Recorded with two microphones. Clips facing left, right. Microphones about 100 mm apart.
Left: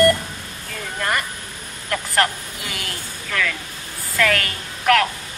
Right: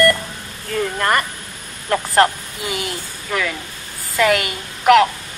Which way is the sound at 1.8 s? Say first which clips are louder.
Right 6 dB; 30° right (ahead or behind).